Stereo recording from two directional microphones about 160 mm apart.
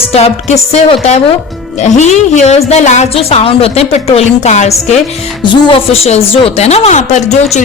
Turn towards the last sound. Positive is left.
turn(degrees=45)  # may be behind; listen again after turning